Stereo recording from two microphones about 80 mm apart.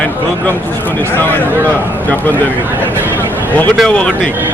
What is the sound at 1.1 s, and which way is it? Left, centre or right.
Speech, left.